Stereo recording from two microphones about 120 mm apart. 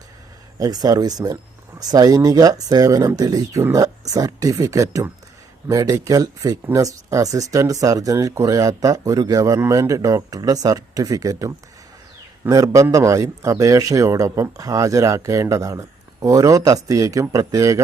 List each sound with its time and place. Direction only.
0.6 s a man's voice: 30° right (ahead or behind)